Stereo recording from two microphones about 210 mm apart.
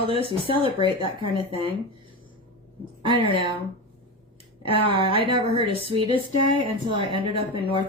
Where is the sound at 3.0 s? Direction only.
25° right (ahead or behind).